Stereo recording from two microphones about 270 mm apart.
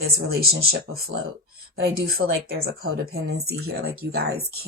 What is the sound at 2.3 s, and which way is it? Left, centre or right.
Speech, right.